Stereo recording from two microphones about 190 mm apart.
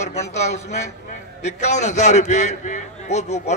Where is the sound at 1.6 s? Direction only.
35° left (ahead or behind).